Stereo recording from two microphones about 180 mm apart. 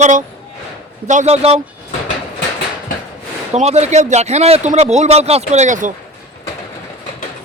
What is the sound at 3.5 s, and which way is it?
A man's voice, 35° right (ahead or behind).